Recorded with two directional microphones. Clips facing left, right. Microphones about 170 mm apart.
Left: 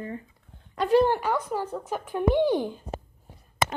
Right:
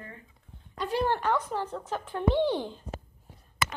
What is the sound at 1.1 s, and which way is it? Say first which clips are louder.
Speech: left 2 dB; 10° left (ahead or behind).